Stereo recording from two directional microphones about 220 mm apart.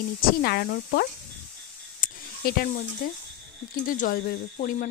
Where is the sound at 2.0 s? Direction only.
40° left (ahead or behind).